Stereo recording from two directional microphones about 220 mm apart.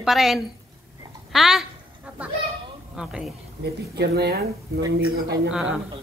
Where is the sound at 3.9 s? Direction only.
50° right (ahead or behind).